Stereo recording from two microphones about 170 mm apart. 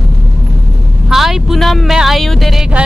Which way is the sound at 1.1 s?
Centre (ahead or behind).